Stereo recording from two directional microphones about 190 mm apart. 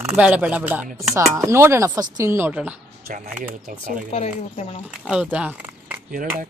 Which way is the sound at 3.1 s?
45° right (ahead or behind).